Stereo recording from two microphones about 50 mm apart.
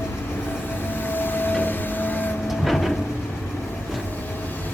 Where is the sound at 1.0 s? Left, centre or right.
Left.